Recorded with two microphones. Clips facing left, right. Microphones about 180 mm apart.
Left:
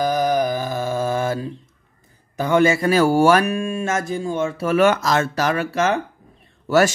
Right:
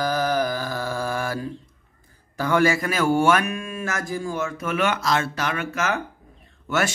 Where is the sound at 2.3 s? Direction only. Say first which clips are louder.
Left 3 dB; 20° left (ahead or behind).